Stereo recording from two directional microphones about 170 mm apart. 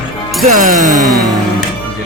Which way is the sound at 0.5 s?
50° right (ahead or behind).